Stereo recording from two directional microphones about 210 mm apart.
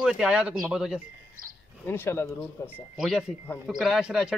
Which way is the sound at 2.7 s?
Centre (ahead or behind).